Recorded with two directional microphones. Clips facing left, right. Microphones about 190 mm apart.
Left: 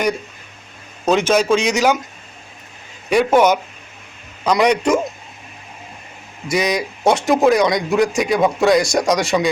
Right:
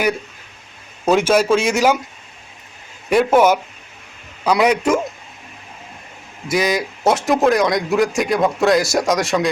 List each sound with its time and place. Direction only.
1.0 s a man's voice: 10° right (ahead or behind)
3.1 s a man's voice: 5° right (ahead or behind)
6.5 s a man's voice: centre (ahead or behind)